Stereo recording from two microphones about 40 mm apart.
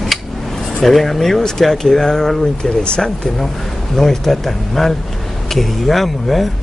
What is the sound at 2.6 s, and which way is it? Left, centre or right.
Speech, left.